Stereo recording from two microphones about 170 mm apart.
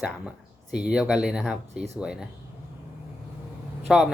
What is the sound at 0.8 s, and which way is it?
Speech, 5° right (ahead or behind).